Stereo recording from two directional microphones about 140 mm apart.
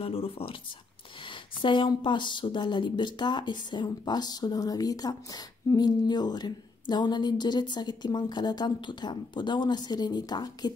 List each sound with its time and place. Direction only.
0.0 s speech: 45° left (ahead or behind)
1.6 s speech: 35° left (ahead or behind)